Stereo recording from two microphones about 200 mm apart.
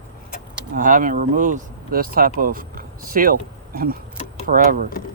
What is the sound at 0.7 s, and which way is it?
Speech, 40° right (ahead or behind).